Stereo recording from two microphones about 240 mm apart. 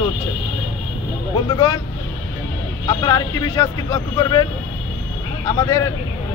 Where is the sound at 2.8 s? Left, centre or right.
Centre.